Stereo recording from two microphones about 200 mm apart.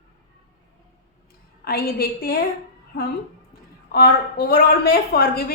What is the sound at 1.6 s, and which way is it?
Speech, 50° left (ahead or behind).